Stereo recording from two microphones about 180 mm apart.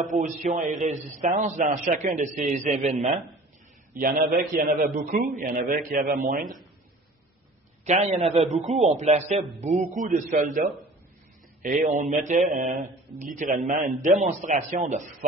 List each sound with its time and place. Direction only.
0.0 s a man's voice: 45° right (ahead or behind)
3.9 s a man's voice: 50° right (ahead or behind)
7.8 s a man's voice: 40° right (ahead or behind)